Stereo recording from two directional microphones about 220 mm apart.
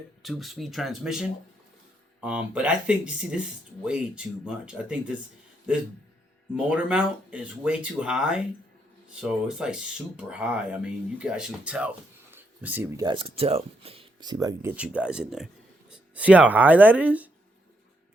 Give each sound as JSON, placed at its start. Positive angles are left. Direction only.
{"t": 0.2, "sound": "speech", "side_deg": 0}